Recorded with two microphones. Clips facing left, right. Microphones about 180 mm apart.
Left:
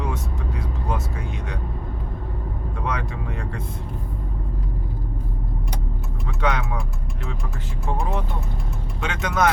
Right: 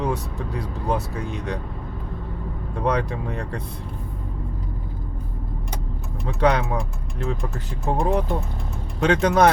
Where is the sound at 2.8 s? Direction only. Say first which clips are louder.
Right 6 dB; 35° right (ahead or behind).